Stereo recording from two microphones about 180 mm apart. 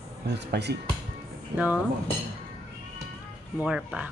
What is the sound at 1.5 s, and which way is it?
Speech, 10° right (ahead or behind).